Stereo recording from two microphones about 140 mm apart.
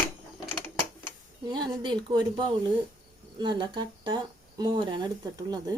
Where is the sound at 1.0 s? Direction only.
30° right (ahead or behind).